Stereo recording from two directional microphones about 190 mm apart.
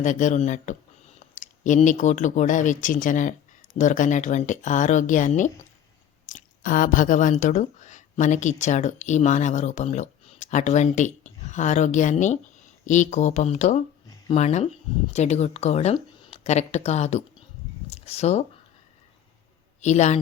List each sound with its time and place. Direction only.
0.0 s speech: 40° left (ahead or behind)
17.8 s a sound: 35° left (ahead or behind)
19.8 s speech: 35° left (ahead or behind)